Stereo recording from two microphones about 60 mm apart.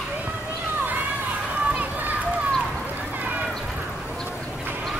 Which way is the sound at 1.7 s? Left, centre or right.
Right.